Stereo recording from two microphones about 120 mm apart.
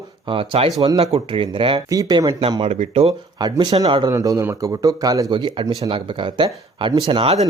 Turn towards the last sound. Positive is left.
turn(degrees=-55)  # may be behind; listen again after turning